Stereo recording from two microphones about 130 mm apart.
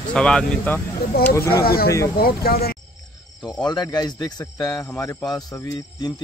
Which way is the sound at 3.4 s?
35° left (ahead or behind).